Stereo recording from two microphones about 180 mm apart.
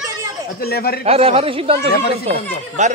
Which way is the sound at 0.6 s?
60° left (ahead or behind).